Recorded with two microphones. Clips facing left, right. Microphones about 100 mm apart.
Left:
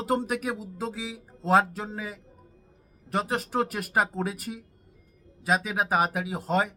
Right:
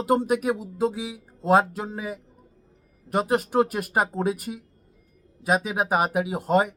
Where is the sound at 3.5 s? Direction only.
10° right (ahead or behind).